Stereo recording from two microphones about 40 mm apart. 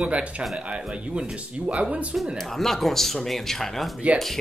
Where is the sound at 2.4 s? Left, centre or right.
Centre.